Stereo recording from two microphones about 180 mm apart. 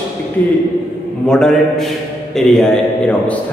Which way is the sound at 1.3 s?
Centre (ahead or behind).